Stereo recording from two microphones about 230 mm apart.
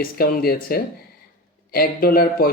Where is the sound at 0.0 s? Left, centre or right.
Left.